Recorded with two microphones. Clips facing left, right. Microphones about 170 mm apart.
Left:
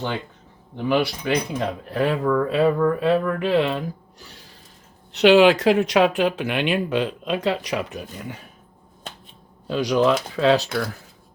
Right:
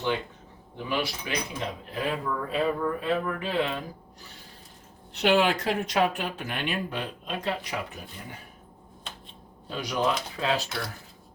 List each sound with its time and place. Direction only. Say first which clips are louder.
0.9 s speech: left 9 dB; 70° left (ahead or behind)
5.1 s speech: left 9 dB; 90° left
9.6 s speech: left 9 dB; 90° left